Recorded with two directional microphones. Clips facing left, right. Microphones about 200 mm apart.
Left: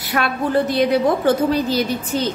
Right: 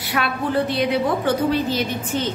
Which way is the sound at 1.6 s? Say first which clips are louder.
Left 3 dB; 40° left (ahead or behind).